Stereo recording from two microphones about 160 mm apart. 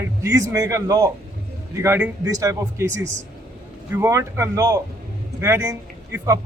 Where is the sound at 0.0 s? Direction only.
20° right (ahead or behind).